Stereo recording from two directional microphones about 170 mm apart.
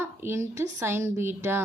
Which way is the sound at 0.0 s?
15° right (ahead or behind).